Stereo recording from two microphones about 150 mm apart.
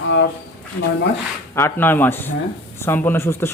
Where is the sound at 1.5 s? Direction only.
15° left (ahead or behind).